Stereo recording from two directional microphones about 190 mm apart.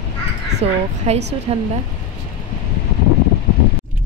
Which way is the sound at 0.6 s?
30° right (ahead or behind).